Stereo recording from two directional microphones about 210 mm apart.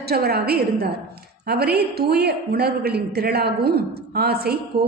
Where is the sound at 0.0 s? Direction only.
50° right (ahead or behind).